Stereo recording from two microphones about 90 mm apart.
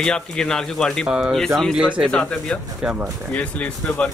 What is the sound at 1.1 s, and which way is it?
Speech, 10° right (ahead or behind).